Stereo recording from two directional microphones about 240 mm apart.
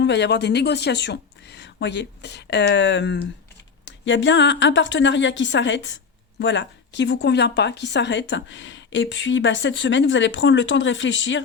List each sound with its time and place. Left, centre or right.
0.0 s a woman's voice: left